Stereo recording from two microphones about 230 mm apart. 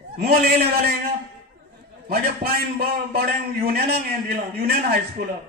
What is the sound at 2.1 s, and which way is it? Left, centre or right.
A man's voice, right.